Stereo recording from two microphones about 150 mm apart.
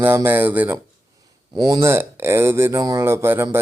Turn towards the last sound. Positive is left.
turn(degrees=-15)  # may be behind; listen again after turning